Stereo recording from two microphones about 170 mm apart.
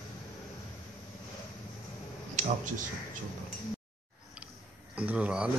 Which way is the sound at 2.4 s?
50° right (ahead or behind).